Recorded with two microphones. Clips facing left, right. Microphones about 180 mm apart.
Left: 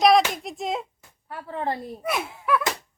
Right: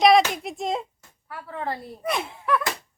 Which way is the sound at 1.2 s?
25° left (ahead or behind).